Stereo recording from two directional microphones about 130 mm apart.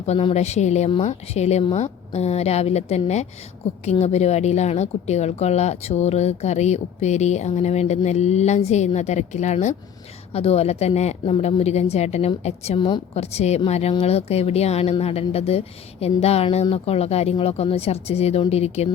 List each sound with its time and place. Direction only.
0.0 s speech: 50° left (ahead or behind)
10.3 s speech: 50° left (ahead or behind)